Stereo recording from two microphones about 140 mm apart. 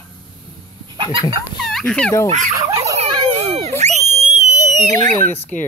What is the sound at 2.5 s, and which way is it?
Dog, 20° right (ahead or behind).